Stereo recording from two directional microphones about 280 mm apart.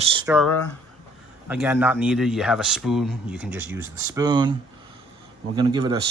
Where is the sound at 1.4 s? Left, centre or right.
Centre.